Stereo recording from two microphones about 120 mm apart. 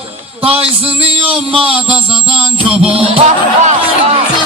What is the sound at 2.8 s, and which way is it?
Music, 55° right (ahead or behind).